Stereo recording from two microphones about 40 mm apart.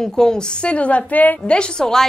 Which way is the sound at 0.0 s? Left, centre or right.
Centre.